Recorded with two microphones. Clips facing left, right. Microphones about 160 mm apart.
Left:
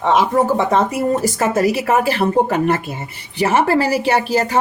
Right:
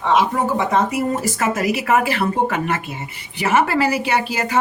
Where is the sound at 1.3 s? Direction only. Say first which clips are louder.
Left 4 dB; 30° left (ahead or behind).